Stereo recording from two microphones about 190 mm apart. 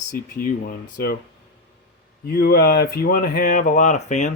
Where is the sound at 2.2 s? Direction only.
55° left (ahead or behind).